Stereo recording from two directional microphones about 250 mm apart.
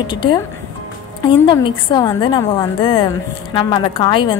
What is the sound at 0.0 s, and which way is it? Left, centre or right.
A woman's voice, centre.